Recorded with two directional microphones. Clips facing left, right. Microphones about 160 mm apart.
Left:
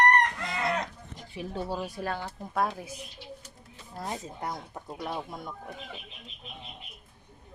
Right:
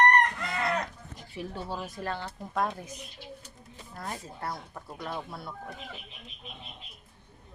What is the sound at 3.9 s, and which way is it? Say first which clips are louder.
Speech: left 3 dB; 20° left (ahead or behind).